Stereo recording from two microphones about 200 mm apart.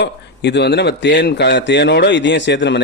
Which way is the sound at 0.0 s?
60° left (ahead or behind).